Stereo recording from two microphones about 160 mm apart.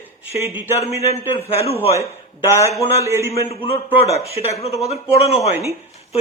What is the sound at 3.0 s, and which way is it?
Speech, 15° right (ahead or behind).